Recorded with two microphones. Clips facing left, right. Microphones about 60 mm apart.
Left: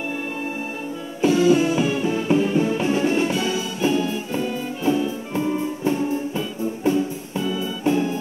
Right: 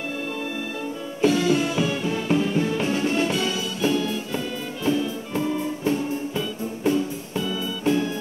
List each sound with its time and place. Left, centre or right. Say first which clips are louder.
1.2 s music: left 4 dB; left